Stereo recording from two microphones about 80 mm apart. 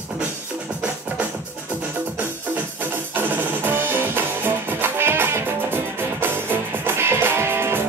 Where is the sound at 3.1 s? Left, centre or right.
Right.